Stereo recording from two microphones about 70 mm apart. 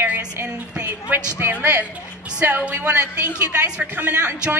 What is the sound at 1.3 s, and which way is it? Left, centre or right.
A woman's voice, right.